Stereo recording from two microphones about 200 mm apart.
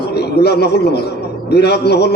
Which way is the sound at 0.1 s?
55° left (ahead or behind).